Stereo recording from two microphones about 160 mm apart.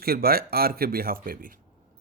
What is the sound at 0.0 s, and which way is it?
A man's voice, 70° right (ahead or behind).